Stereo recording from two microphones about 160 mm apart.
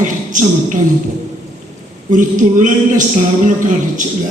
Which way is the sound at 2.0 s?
50° right (ahead or behind).